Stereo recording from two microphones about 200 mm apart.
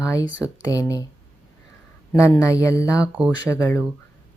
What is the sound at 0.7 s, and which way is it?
Speech, 15° left (ahead or behind).